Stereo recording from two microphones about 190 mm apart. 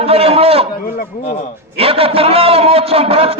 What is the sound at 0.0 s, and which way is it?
Speech, 30° right (ahead or behind).